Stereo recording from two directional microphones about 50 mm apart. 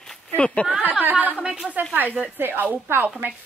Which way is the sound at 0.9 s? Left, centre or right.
Right.